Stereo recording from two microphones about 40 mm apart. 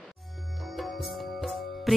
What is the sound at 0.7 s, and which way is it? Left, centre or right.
Music, centre.